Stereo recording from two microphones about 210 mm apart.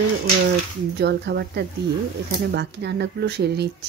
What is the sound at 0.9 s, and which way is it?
A woman's voice, 50° right (ahead or behind).